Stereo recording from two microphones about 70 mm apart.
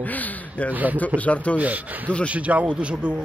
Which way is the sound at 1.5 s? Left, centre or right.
Right.